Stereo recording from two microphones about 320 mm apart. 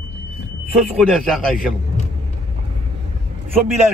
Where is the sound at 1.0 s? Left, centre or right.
Centre.